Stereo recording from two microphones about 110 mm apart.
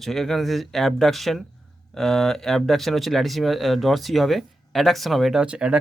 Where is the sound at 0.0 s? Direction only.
Centre (ahead or behind).